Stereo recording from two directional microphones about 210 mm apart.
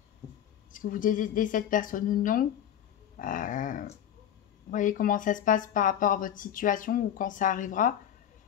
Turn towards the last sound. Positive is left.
turn(degrees=40)  # may be behind; listen again after turning